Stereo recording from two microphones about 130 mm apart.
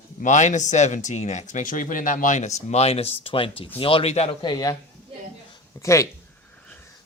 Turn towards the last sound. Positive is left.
turn(degrees=25)  # may be behind; listen again after turning